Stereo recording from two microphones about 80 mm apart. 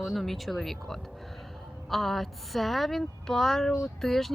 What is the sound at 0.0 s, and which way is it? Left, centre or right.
Speech, centre.